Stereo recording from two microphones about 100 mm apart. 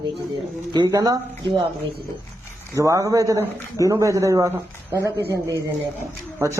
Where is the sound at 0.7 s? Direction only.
45° right (ahead or behind).